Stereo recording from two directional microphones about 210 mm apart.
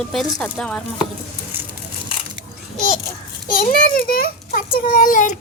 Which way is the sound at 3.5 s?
40° left (ahead or behind).